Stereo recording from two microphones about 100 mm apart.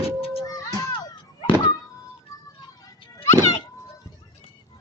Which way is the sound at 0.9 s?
60° left (ahead or behind).